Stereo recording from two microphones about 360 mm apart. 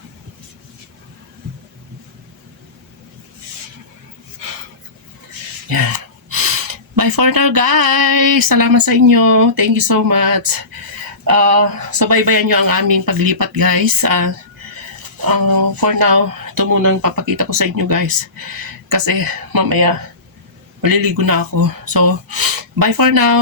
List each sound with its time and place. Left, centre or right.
5.6 s speech: right